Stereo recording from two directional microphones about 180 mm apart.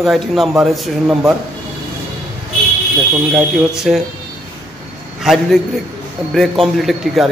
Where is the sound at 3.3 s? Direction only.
5° right (ahead or behind).